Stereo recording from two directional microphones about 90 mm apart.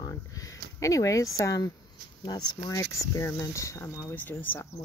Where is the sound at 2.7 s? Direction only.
35° left (ahead or behind).